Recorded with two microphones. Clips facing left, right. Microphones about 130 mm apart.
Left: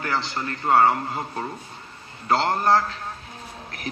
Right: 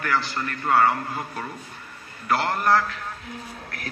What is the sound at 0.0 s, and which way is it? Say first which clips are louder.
A man's voice: right 1 dB; 20° left (ahead or behind).